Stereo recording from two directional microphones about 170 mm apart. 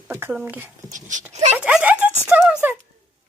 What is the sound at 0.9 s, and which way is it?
Speech, 50° right (ahead or behind).